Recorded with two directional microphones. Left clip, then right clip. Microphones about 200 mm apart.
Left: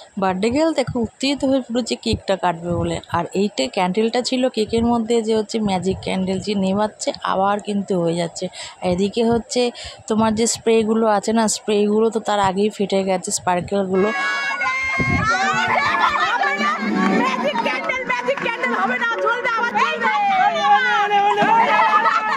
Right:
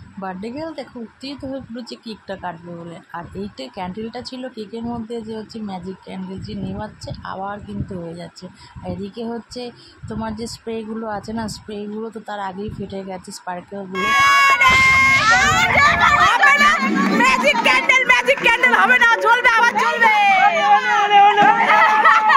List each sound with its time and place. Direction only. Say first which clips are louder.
0.2 s speech: left 10 dB; 55° left (ahead or behind)
8.8 s speech: left 10 dB; 55° left (ahead or behind)
13.9 s speech: right 8 dB; centre (ahead or behind)
15.2 s a child's voice: right 4 dB; 35° right (ahead or behind)
16.4 s a sound: right 7 dB; 5° right (ahead or behind)
20.6 s children playing: right 1 dB; 55° left (ahead or behind)
21.6 s snicker: right 3 dB; 30° right (ahead or behind)